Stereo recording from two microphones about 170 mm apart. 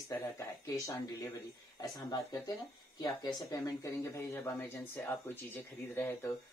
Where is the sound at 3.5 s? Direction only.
20° left (ahead or behind).